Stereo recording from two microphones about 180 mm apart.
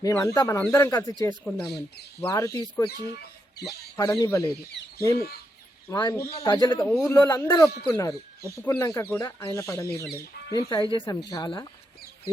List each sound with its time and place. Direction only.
0.0 s speech: 15° left (ahead or behind)
1.5 s speech: centre (ahead or behind)
2.2 s speech: 15° left (ahead or behind)
5.9 s speech: 20° left (ahead or behind)